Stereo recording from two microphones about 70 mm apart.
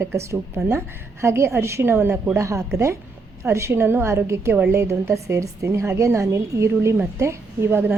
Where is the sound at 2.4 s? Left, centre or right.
Right.